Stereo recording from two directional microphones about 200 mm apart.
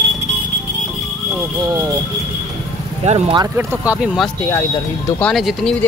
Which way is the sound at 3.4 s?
10° right (ahead or behind).